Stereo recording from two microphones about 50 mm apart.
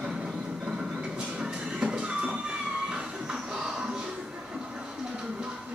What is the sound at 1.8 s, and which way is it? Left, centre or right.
Music, right.